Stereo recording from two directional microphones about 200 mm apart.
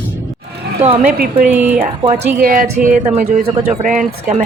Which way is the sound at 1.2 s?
45° right (ahead or behind).